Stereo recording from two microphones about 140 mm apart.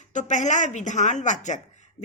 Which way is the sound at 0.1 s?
60° left (ahead or behind).